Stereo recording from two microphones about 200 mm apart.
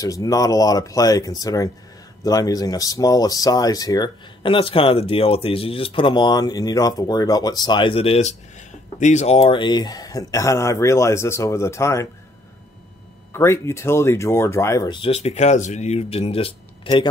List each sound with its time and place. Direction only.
0.0 s speech: 15° left (ahead or behind)
13.3 s speech: 15° left (ahead or behind)